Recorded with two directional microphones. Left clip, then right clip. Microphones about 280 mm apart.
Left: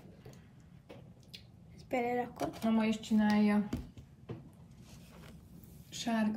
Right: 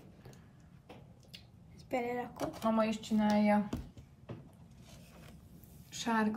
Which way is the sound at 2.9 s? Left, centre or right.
Centre.